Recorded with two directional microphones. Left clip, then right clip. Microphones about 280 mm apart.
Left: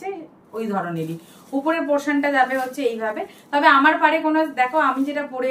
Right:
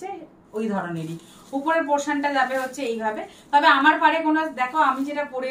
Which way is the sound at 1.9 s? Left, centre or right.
Centre.